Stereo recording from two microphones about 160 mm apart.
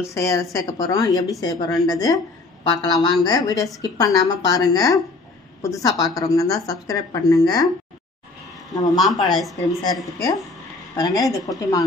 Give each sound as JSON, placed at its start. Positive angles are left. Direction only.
{"t": 0.1, "sound": "a woman's voice", "side_deg": 20}
{"t": 8.9, "sound": "a woman's voice", "side_deg": 0}
{"t": 11.0, "sound": "a woman's voice", "side_deg": 25}